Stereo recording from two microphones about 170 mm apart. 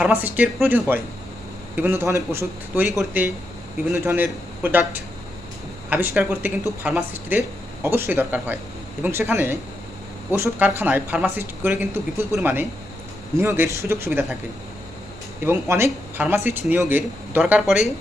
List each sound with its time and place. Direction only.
0.0 s speech: 10° right (ahead or behind)
15.4 s speech: 15° right (ahead or behind)